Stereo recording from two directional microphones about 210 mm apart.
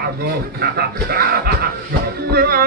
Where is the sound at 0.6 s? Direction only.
45° right (ahead or behind).